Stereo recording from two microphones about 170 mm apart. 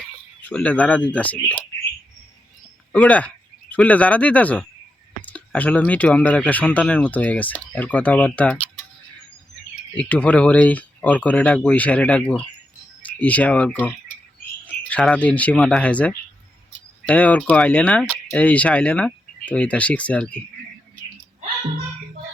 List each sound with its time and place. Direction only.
0.4 s speech: 10° left (ahead or behind)
2.9 s speech: 10° left (ahead or behind)
9.9 s speech: 10° left (ahead or behind)